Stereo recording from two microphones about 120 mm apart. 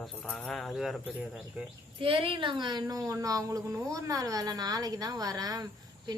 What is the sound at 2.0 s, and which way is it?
Speech, 50° right (ahead or behind).